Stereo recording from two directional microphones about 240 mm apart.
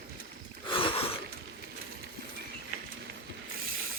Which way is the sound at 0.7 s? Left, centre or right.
Left.